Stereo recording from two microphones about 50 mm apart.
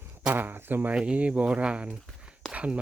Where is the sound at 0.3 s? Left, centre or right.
Right.